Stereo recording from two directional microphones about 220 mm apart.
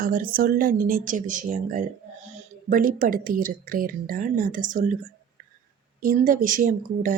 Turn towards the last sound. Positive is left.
turn(degrees=-35)  # may be behind; listen again after turning